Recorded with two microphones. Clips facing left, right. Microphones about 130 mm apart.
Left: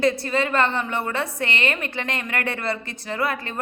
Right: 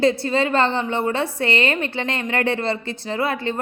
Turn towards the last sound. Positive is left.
turn(degrees=-25)  # may be behind; listen again after turning